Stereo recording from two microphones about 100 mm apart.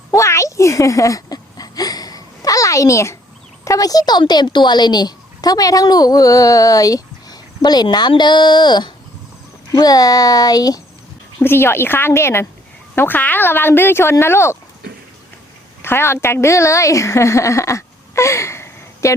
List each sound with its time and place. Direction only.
0.1 s a sound: 30° left (ahead or behind)
3.6 s speech: 35° left (ahead or behind)
11.3 s speech: 25° left (ahead or behind)
15.8 s a woman's voice: 25° left (ahead or behind)